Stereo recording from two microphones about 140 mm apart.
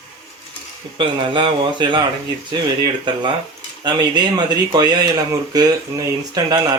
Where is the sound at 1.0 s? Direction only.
35° right (ahead or behind).